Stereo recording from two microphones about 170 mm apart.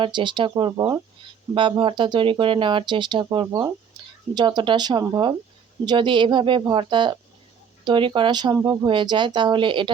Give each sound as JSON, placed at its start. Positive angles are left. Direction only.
{"t": 0.0, "sound": "speech", "side_deg": -30}